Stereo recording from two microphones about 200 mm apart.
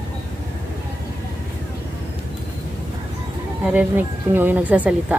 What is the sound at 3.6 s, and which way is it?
Speech, 10° right (ahead or behind).